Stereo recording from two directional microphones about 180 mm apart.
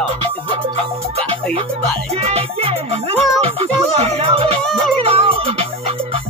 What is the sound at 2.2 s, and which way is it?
Music, 35° right (ahead or behind).